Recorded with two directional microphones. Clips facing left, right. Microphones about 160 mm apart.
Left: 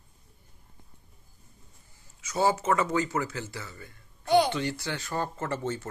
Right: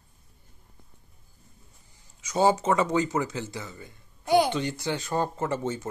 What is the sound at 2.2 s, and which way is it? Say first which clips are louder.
Speech: right 3 dB; 20° right (ahead or behind).